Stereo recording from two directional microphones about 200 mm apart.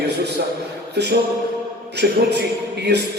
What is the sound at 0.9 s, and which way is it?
Music, 55° right (ahead or behind).